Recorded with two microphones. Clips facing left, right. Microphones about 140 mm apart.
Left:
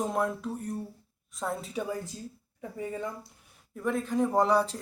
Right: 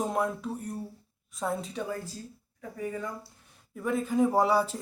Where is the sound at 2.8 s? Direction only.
20° left (ahead or behind).